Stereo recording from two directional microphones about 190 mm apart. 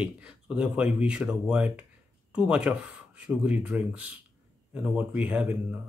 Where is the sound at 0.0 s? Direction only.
5° right (ahead or behind).